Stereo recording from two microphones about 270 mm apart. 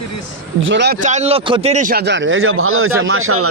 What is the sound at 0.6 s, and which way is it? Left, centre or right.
Speech, right.